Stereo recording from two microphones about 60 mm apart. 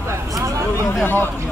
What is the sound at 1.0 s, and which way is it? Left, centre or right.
Speech, left.